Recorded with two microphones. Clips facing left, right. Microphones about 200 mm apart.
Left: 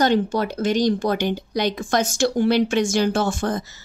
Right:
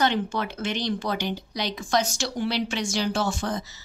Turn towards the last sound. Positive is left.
turn(degrees=50)  # may be behind; listen again after turning